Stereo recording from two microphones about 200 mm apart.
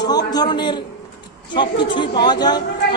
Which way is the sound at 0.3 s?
20° left (ahead or behind).